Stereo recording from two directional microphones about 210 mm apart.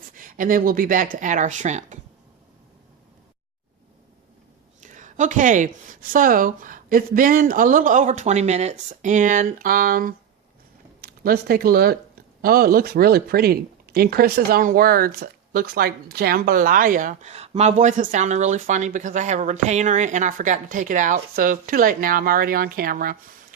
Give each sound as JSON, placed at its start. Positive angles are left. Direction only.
{"t": 0.2, "sound": "a woman's voice", "side_deg": -40}
{"t": 4.8, "sound": "a woman's voice", "side_deg": -35}